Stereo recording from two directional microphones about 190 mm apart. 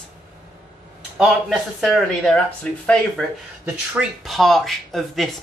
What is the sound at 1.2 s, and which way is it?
Speech, centre (ahead or behind).